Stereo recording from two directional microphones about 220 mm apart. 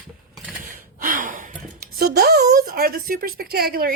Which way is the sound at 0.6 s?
40° right (ahead or behind).